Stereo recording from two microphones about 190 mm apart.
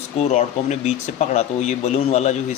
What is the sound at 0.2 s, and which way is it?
Speech, 40° left (ahead or behind).